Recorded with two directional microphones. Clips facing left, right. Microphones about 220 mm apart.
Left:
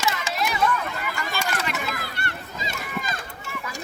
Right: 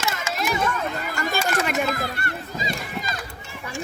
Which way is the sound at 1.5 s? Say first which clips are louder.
Right 6 dB; 50° right (ahead or behind).